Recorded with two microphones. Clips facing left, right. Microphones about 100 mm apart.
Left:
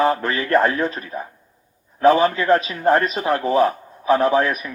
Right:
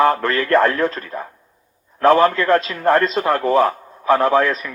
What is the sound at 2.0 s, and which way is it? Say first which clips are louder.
Speech: right 2 dB; 60° right (ahead or behind).